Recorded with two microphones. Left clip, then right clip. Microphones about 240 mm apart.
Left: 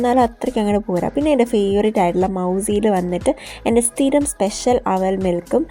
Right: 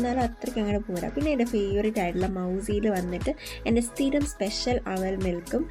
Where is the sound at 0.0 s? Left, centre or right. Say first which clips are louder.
Left 12 dB; left.